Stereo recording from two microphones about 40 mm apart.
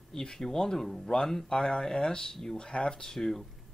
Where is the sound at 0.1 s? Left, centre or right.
Centre.